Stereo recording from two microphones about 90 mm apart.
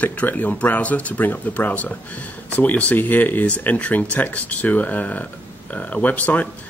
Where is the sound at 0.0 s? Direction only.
15° left (ahead or behind).